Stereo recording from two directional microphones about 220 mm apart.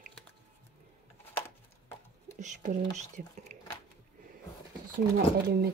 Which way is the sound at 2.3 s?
35° right (ahead or behind).